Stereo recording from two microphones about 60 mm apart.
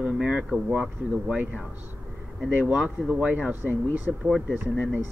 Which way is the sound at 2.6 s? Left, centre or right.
Right.